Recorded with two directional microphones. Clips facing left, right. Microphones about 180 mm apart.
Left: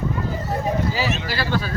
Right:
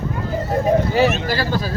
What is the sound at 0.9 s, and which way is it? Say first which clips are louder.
Speech: right 7 dB; 50° right (ahead or behind).